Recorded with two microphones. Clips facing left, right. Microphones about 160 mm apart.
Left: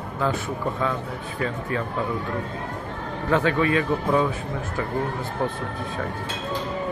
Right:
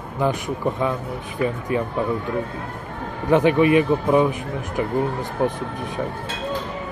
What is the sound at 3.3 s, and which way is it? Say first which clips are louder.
Speech: right 6 dB; 15° right (ahead or behind).